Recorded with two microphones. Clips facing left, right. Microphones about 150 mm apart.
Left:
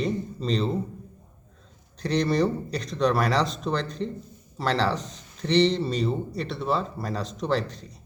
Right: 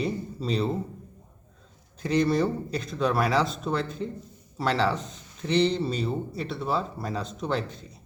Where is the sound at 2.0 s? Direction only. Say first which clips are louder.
Even; 5° right (ahead or behind).